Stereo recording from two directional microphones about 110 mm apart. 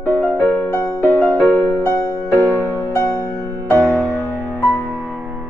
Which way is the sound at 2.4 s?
20° right (ahead or behind).